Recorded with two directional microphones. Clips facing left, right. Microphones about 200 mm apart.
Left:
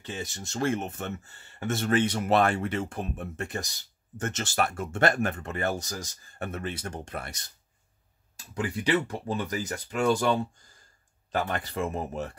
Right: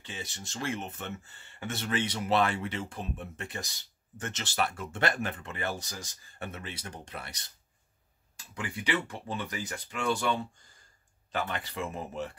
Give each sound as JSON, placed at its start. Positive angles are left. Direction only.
{"t": 0.0, "sound": "speech", "side_deg": 45}
{"t": 8.5, "sound": "speech", "side_deg": 40}